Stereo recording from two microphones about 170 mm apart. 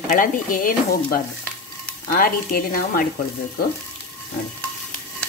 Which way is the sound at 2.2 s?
60° left (ahead or behind).